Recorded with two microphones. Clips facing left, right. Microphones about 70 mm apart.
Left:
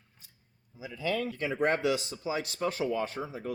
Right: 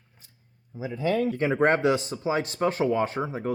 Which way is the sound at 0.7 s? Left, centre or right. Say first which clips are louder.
Right 6 dB; right.